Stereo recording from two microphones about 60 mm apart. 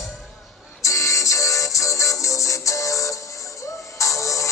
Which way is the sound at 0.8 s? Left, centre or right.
Left.